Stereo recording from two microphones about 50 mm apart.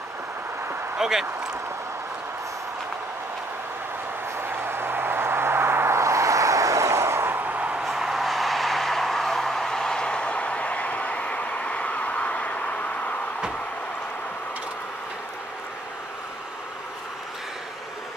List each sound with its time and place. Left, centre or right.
0.9 s speech: centre
4.4 s vehicle: right
7.2 s a sound: right
7.8 s vehicle: centre; by 12.8 s left